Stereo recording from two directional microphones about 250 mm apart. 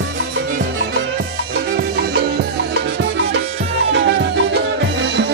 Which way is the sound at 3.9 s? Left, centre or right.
Right.